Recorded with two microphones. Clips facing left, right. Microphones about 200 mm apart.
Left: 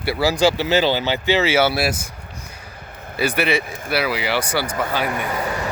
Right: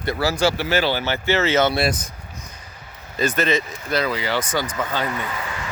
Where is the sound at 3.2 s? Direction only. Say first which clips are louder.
Left 1 dB; 10° left (ahead or behind).